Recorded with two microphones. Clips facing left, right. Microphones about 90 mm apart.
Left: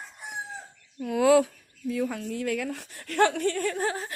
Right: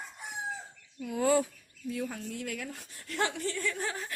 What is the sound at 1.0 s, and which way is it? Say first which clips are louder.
Speech: left 7 dB; 85° left.